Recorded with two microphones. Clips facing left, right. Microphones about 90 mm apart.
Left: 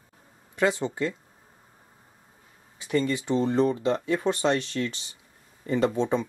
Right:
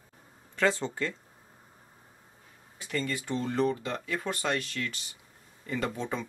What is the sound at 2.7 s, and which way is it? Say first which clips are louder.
Speech: left 7 dB; 20° left (ahead or behind).